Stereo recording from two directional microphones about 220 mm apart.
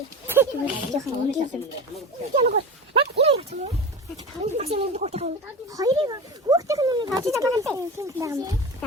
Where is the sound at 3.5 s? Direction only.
30° right (ahead or behind); by 8.1 s 15° right (ahead or behind).